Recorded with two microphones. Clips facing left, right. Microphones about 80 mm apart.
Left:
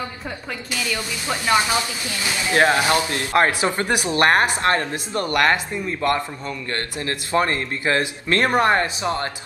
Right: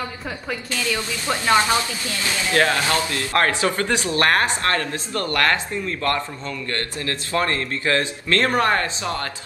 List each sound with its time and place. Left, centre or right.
1.5 s speech: centre